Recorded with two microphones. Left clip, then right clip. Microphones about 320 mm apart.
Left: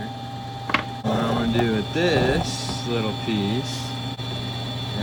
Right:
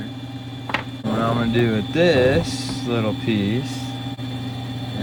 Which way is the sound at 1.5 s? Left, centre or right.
Right.